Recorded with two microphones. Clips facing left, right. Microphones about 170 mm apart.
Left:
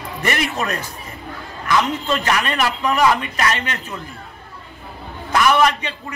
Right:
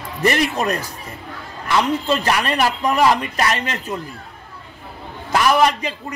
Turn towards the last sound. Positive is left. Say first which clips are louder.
# even
turn(degrees=-35)  # may be behind; listen again after turning